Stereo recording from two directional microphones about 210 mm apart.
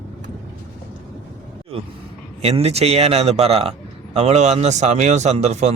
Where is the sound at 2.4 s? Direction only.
30° right (ahead or behind).